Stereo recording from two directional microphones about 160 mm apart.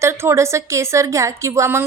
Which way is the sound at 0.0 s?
15° right (ahead or behind).